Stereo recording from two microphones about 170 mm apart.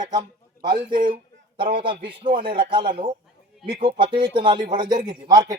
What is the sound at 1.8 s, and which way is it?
Speech, 30° right (ahead or behind).